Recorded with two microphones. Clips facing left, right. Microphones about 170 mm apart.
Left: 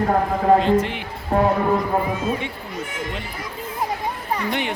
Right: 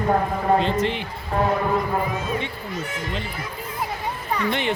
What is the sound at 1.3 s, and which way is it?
Speech, 45° left (ahead or behind).